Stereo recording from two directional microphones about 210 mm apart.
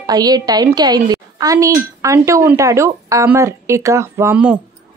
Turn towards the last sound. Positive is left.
turn(degrees=-5)  # may be behind; listen again after turning